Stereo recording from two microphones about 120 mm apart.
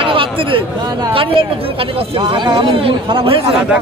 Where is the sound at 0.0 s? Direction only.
45° right (ahead or behind).